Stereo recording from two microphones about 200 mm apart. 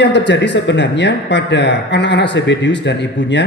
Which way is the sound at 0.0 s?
60° left (ahead or behind).